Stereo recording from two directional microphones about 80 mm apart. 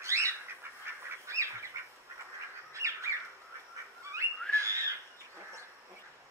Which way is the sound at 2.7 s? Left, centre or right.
Right.